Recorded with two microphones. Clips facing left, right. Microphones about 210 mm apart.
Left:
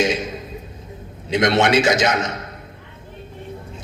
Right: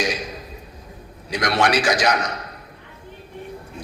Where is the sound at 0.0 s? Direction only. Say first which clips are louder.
Left 5 dB; 25° left (ahead or behind).